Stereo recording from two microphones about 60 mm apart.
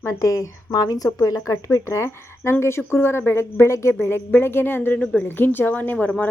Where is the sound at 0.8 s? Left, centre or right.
Left.